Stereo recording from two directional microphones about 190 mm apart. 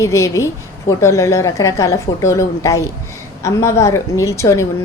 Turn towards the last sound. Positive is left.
turn(degrees=15)  # may be behind; listen again after turning